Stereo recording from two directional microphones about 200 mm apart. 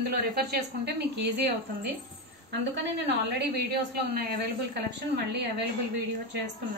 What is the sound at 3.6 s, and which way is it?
Speech, 55° right (ahead or behind).